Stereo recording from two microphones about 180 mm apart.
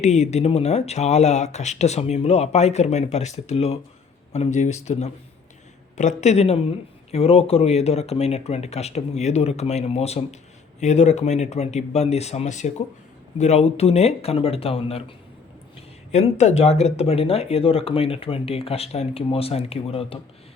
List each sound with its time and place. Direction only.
0.0 s speech: 40° left (ahead or behind)
16.1 s speech: 40° left (ahead or behind)